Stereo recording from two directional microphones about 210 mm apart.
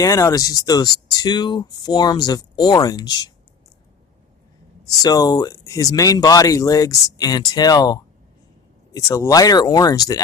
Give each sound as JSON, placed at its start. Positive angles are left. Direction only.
{"t": 0.0, "sound": "speech", "side_deg": 15}
{"t": 5.0, "sound": "speech", "side_deg": 15}